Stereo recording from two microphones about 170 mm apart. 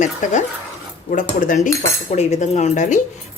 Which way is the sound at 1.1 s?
50° left (ahead or behind).